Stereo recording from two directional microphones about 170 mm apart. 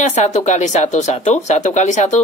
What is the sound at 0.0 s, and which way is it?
Speech, 40° left (ahead or behind).